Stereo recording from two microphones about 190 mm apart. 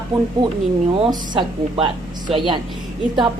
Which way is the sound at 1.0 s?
25° right (ahead or behind).